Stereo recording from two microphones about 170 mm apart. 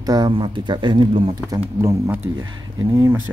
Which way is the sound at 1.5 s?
15° right (ahead or behind).